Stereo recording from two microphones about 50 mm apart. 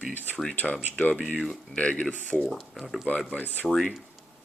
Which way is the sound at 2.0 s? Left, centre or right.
Centre.